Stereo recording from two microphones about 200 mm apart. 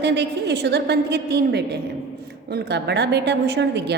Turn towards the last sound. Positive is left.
turn(degrees=-60)  # may be behind; listen again after turning